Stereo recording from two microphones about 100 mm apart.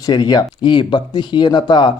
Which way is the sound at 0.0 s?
45° left (ahead or behind).